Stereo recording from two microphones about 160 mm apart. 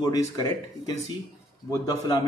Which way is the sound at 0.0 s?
25° left (ahead or behind).